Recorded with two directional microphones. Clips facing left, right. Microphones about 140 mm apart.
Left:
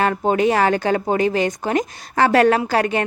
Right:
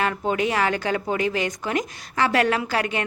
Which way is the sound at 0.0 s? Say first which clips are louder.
Left 6 dB; 40° left (ahead or behind).